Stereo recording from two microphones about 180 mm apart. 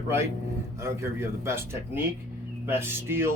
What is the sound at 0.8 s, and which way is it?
Speech, 15° right (ahead or behind).